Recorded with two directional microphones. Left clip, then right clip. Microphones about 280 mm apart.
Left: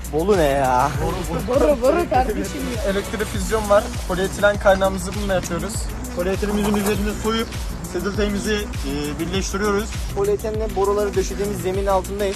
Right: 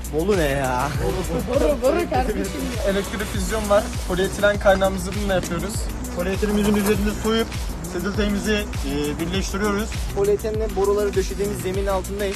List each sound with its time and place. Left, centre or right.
0.3 s speech: centre
1.8 s speech: left
2.4 s speech: centre